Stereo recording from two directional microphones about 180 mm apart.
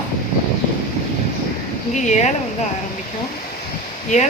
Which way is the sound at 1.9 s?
40° left (ahead or behind).